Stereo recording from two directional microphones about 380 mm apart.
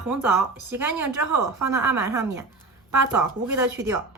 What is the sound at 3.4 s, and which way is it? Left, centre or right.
Speech, centre.